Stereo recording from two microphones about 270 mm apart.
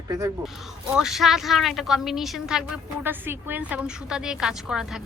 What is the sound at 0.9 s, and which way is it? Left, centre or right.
A woman's voice, centre.